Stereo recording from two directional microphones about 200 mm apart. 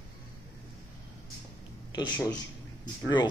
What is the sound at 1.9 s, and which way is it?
Speech, 20° left (ahead or behind).